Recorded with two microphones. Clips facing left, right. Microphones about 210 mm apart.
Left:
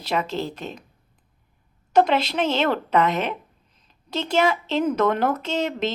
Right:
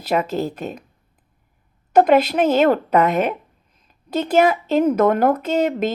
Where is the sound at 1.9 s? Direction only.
50° right (ahead or behind).